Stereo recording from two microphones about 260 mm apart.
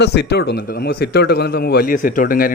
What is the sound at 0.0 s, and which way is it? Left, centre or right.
A man's voice, left.